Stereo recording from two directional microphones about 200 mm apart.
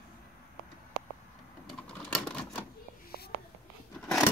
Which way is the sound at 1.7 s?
5° left (ahead or behind).